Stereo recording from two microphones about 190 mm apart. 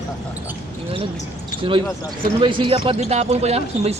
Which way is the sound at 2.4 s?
25° right (ahead or behind).